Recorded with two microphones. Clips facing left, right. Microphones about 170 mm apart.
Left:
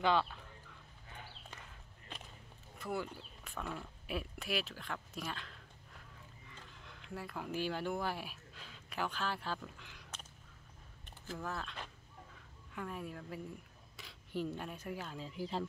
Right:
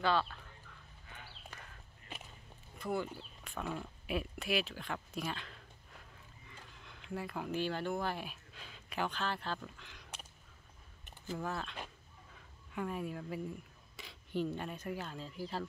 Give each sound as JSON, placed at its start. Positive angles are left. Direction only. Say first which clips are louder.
{"t": 0.0, "sound": "speech", "louder": "left 1 dB", "side_deg": 15}
{"t": 1.5, "sound": "walk", "louder": "even", "side_deg": 25}
{"t": 2.1, "sound": "a sound", "louder": "right 1 dB", "side_deg": -5}
{"t": 2.8, "sound": "speech", "louder": "right 3 dB", "side_deg": 5}
{"t": 6.5, "sound": "a sound", "louder": "right 1 dB", "side_deg": 0}
{"t": 7.6, "sound": "speech", "louder": "even", "side_deg": 10}
{"t": 11.1, "sound": "speech", "louder": "right 3 dB", "side_deg": -5}